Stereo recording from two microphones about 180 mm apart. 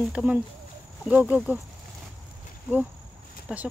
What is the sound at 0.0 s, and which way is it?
Speech, 5° right (ahead or behind).